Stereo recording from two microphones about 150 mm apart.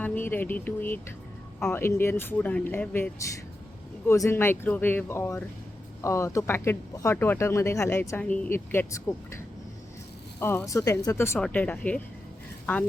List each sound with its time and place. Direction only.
0.0 s speech: 15° left (ahead or behind)
10.4 s speech: 15° left (ahead or behind)